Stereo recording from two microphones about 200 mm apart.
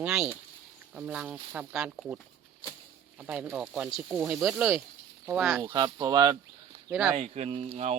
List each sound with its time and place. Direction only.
0.0 s speech: 5° right (ahead or behind)
5.6 s speech: 20° right (ahead or behind)
6.9 s speech: centre (ahead or behind)
7.2 s speech: 30° right (ahead or behind)